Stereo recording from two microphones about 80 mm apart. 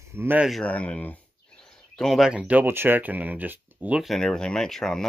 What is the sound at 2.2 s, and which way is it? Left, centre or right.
Speech, centre.